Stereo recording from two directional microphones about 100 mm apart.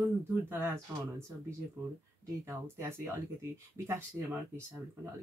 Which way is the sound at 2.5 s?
25° right (ahead or behind).